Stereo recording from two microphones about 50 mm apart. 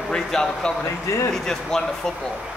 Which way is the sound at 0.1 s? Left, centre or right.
Centre.